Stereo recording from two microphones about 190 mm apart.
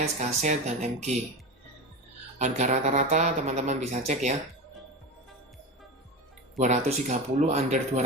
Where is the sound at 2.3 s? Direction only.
40° right (ahead or behind).